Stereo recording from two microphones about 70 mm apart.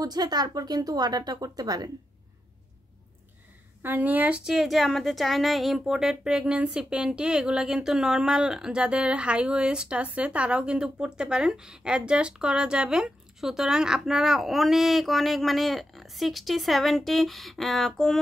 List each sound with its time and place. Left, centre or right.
0.0 s speech: right
3.8 s speech: right
4.5 s speech: centre